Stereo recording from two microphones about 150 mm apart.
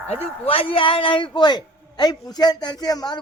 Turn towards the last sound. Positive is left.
turn(degrees=25)  # may be behind; listen again after turning